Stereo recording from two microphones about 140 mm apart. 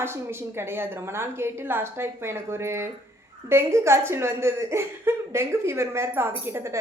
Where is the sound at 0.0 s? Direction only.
15° right (ahead or behind).